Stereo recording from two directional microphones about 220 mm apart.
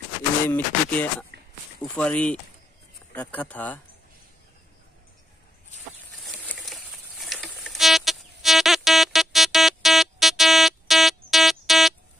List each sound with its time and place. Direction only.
0.5 s speech: 5° left (ahead or behind)
1.3 s a sound: 50° right (ahead or behind)
1.8 s speech: 5° left (ahead or behind)
6.1 s patter: 5° left (ahead or behind)